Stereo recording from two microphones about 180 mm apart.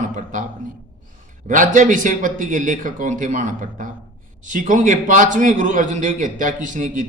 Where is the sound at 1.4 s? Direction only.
45° right (ahead or behind).